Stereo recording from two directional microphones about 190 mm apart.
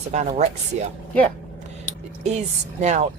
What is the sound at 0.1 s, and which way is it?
Speech, 40° right (ahead or behind).